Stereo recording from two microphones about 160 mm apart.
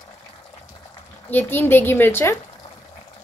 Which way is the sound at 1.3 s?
15° left (ahead or behind).